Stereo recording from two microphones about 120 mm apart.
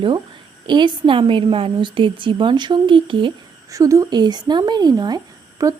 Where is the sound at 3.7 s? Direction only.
25° right (ahead or behind).